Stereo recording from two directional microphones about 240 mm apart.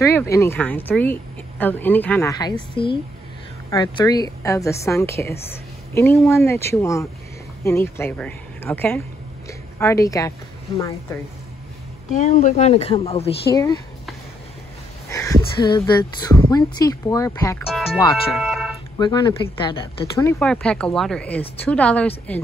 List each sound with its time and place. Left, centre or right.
0.3 s a woman's voice: centre
12.1 s a woman's voice: left
15.0 s a woman's voice: centre
18.3 s a sound: centre
18.9 s a woman's voice: centre
20.3 s speech: centre